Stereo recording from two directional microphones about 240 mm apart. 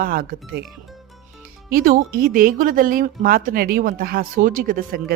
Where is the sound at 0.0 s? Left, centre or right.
Right.